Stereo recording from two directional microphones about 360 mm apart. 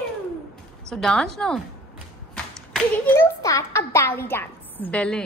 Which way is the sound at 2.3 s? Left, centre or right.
Centre.